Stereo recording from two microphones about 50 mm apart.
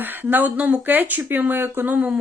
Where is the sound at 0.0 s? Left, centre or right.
Right.